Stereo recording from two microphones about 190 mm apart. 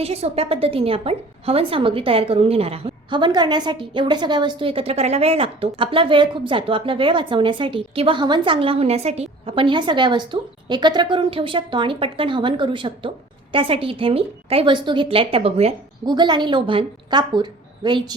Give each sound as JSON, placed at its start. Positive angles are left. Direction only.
{"t": 0.0, "sound": "a woman's voice", "side_deg": -30}